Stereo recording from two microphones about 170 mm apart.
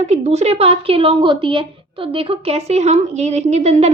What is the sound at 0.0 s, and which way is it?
A woman's voice, 40° right (ahead or behind).